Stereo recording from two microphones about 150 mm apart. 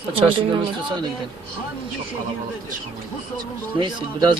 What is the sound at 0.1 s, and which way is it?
Speech, 35° right (ahead or behind).